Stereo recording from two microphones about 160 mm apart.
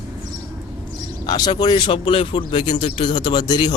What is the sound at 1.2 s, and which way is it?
Speech, 25° left (ahead or behind).